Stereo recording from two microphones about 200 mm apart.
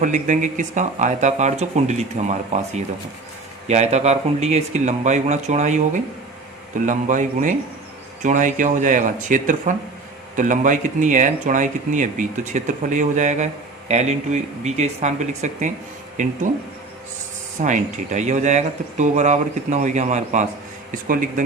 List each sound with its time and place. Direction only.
0.0 s speech: 40° right (ahead or behind)
17.6 s speech: 40° right (ahead or behind)